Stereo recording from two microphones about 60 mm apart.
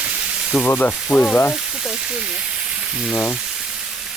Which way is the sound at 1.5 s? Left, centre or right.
Centre.